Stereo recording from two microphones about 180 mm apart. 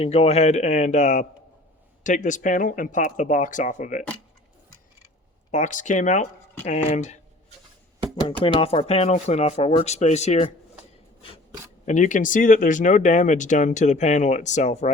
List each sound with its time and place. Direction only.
0.0 s speech: 35° left (ahead or behind)
5.5 s speech: 45° left (ahead or behind)
8.5 s speech: 30° left (ahead or behind)
11.2 s a sound: 30° left (ahead or behind)
11.9 s speech: 45° left (ahead or behind)